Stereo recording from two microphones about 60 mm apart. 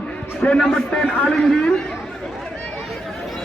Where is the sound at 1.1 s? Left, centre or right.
Left.